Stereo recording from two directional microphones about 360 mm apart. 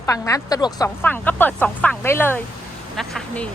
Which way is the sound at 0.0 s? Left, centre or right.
Centre.